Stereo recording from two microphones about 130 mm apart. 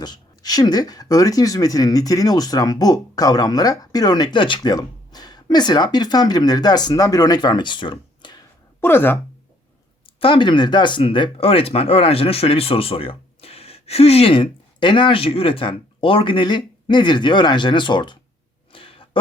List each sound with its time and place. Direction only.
0.0 s speech: 30° left (ahead or behind)
8.8 s speech: 15° left (ahead or behind)
10.2 s speech: 40° left (ahead or behind)
18.7 s a sound: 45° left (ahead or behind)